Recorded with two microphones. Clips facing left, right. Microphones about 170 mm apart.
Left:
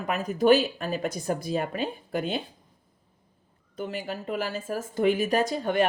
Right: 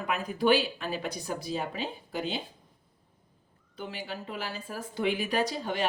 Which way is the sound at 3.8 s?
45° left (ahead or behind).